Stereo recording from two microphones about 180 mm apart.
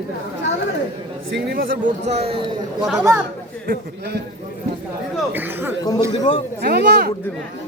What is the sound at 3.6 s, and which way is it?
Speech, 60° right (ahead or behind).